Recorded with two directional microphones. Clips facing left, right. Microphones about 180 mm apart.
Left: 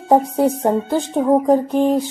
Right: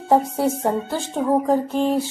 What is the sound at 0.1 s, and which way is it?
Speech, 15° left (ahead or behind).